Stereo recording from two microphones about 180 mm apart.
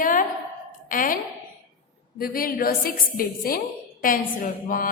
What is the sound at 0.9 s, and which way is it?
A woman's voice, 50° left (ahead or behind).